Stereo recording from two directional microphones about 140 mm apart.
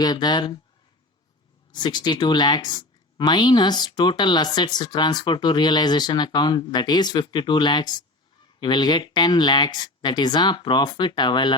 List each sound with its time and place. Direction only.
0.0 s a woman's voice: 30° left (ahead or behind)
1.7 s a woman's voice: 30° left (ahead or behind)